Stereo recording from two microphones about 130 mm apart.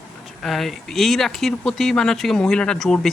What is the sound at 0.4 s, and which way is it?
Speech, centre (ahead or behind).